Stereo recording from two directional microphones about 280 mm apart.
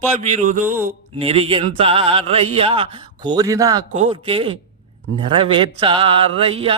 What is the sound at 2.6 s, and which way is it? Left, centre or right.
Speech, centre.